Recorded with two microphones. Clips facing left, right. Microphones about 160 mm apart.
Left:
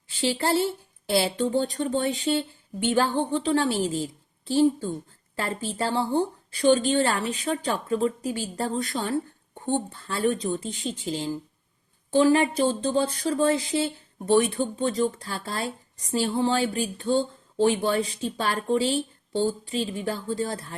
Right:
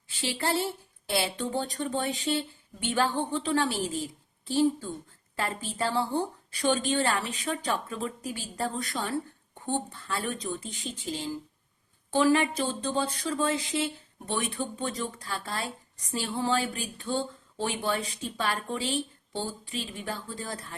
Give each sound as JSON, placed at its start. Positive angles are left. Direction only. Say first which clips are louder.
{"t": 0.1, "sound": "speech", "louder": "left 5 dB", "side_deg": 30}